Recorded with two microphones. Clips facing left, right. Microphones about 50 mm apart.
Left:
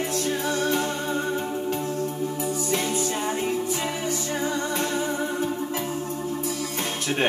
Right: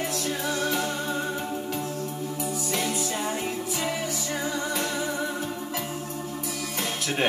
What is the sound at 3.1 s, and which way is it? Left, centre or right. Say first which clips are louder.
Music: left 3 dB; centre.